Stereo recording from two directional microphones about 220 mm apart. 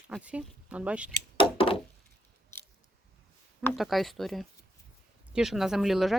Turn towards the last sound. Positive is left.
turn(degrees=0)  # may be behind; listen again after turning